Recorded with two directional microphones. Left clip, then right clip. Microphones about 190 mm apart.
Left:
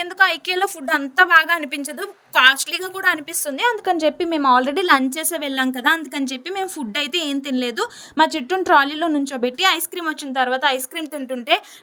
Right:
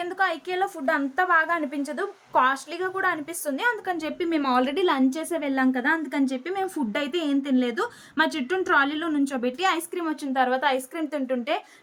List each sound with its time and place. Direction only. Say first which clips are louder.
0.0 s a woman's voice: left 8 dB; 45° left (ahead or behind)
2.8 s a woman's voice: right 3 dB; centre (ahead or behind)
3.1 s a woman's voice: left 7 dB; 40° left (ahead or behind)